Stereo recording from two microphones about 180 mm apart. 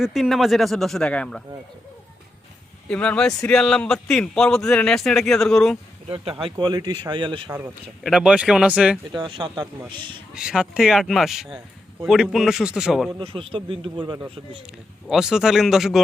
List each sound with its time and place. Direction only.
0.0 s a man's voice: centre (ahead or behind)
2.9 s a man's voice: 5° left (ahead or behind)
6.1 s speech: 30° right (ahead or behind)
8.0 s a man's voice: 5° right (ahead or behind)
9.1 s speech: 25° right (ahead or behind)
10.3 s a man's voice: 5° right (ahead or behind)
13.1 s speech: 30° right (ahead or behind)
15.0 s a man's voice: centre (ahead or behind)